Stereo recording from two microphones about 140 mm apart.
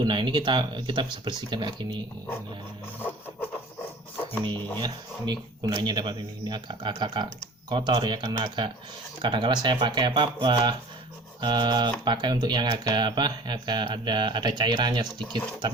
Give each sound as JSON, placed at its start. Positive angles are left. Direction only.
{"t": 0.0, "sound": "speech", "side_deg": -35}
{"t": 4.8, "sound": "speech", "side_deg": -30}